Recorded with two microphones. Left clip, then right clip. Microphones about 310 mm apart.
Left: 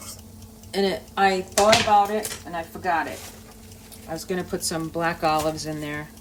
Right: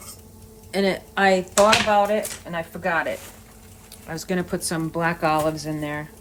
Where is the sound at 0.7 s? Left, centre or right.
Right.